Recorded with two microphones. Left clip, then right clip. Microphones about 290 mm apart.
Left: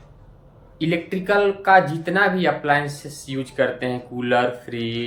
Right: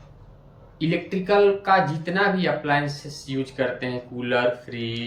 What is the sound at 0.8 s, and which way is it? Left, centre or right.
Speech, centre.